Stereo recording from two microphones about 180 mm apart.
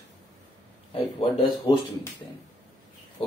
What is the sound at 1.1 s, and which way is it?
Speech, 25° left (ahead or behind).